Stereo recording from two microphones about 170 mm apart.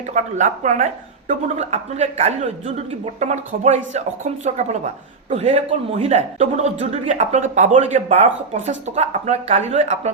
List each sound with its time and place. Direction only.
0.1 s a woman's voice: 45° right (ahead or behind)